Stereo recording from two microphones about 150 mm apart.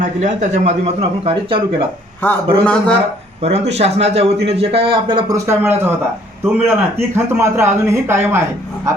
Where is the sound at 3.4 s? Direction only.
45° right (ahead or behind); by 8.4 s 15° right (ahead or behind).